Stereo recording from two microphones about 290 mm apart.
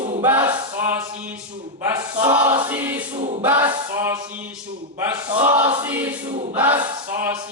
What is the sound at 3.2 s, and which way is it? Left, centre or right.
Choir, right.